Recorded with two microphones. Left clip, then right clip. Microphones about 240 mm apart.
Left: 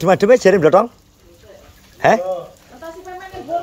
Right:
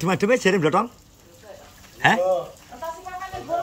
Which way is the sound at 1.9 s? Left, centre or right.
Centre.